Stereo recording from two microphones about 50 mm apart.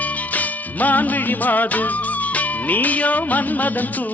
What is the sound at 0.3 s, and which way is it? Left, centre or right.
Music of bollywood, left.